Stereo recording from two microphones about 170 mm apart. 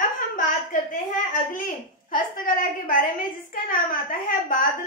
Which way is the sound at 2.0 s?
50° left (ahead or behind).